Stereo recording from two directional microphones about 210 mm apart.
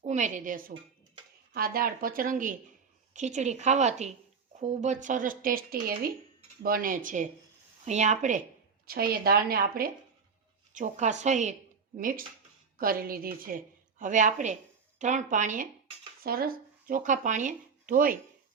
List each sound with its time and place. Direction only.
0.0 s speech: 35° right (ahead or behind)
8.9 s a woman's voice: 45° right (ahead or behind)